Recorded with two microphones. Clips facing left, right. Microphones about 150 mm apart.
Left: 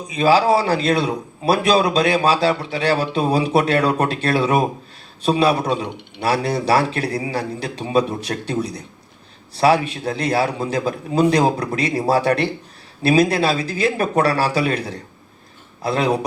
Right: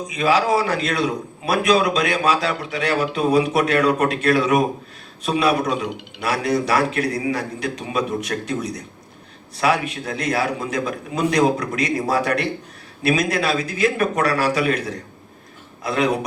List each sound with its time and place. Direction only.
0.1 s a man's voice: 30° left (ahead or behind)